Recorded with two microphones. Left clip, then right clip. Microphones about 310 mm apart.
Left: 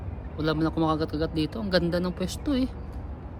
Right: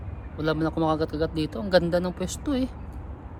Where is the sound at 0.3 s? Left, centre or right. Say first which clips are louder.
Right 1 dB; centre.